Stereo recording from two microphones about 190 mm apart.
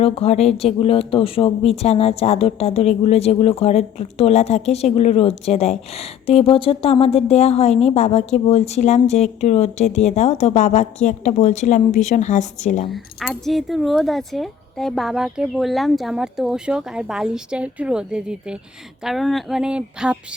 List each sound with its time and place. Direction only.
0.0 s speech: 35° left (ahead or behind)
12.9 s speech: centre (ahead or behind)